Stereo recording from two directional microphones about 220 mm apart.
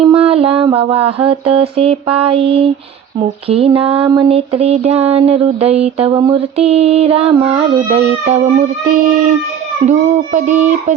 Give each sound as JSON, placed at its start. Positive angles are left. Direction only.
{"t": 0.1, "sound": "music", "side_deg": -25}
{"t": 3.5, "sound": "child singing", "side_deg": -25}
{"t": 9.8, "sound": "speech", "side_deg": -35}